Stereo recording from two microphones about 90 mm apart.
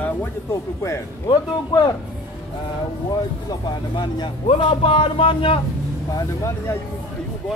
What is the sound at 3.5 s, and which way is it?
Speech, 55° left (ahead or behind).